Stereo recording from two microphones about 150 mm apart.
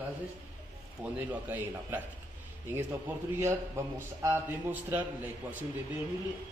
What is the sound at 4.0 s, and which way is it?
A man's voice, 15° right (ahead or behind).